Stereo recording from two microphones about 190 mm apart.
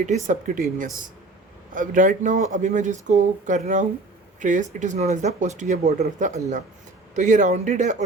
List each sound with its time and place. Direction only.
0.0 s speech: 40° right (ahead or behind)